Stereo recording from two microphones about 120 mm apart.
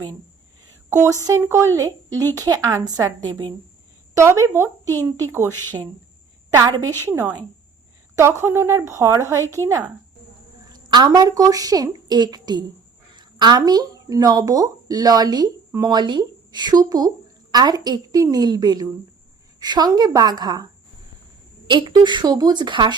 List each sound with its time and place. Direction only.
1.0 s speech: 25° right (ahead or behind)
6.6 s a woman's voice: 30° right (ahead or behind)
21.7 s speech: 40° right (ahead or behind)